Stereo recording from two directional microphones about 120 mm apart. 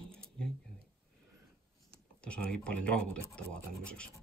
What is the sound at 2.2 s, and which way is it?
Speech, 10° left (ahead or behind).